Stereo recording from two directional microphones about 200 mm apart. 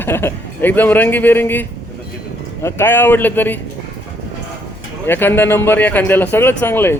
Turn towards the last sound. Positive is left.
turn(degrees=10)  # may be behind; listen again after turning